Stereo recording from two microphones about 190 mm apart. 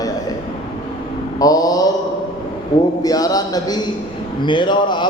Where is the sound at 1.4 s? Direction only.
20° left (ahead or behind).